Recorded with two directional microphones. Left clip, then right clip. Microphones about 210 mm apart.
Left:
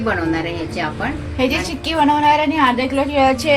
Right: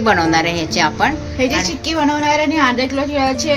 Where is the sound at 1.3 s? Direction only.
5° left (ahead or behind).